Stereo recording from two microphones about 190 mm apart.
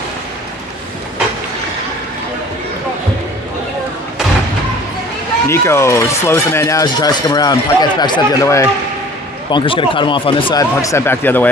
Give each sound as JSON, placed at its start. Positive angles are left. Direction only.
{"t": 5.5, "sound": "speech", "side_deg": 15}